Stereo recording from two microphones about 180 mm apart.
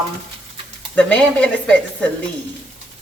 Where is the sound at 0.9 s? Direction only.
5° left (ahead or behind).